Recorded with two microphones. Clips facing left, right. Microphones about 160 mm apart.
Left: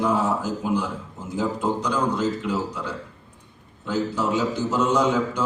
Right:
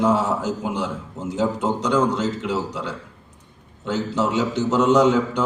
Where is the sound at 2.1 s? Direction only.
80° right.